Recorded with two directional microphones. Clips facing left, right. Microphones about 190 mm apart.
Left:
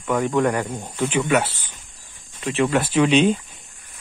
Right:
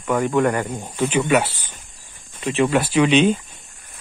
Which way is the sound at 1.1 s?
20° right (ahead or behind).